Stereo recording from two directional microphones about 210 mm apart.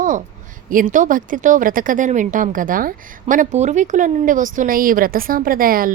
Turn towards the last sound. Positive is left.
turn(degrees=-45)  # may be behind; listen again after turning